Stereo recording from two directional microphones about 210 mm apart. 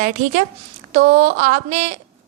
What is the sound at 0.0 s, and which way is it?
A woman's voice, 35° right (ahead or behind).